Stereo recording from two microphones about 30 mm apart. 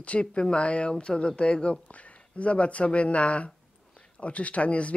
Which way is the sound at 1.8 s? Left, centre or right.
Left.